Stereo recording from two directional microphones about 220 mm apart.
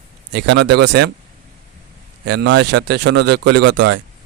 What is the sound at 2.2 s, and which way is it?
A man's voice, 50° right (ahead or behind).